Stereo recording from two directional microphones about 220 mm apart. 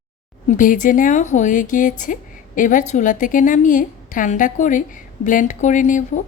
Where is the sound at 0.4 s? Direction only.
35° left (ahead or behind).